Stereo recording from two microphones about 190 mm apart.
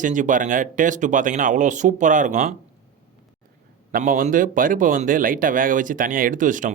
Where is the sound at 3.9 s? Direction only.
45° right (ahead or behind).